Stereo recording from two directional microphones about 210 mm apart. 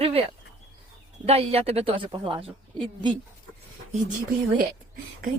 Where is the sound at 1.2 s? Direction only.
30° right (ahead or behind).